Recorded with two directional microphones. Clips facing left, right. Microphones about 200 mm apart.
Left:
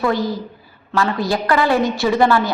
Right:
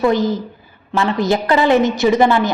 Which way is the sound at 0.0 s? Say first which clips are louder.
Right 4 dB; 20° right (ahead or behind).